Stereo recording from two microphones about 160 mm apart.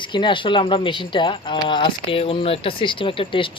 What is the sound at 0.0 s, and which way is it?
Speech, 30° left (ahead or behind).